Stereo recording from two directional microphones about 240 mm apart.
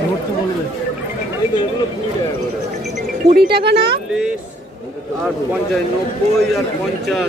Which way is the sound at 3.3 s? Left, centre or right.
Right.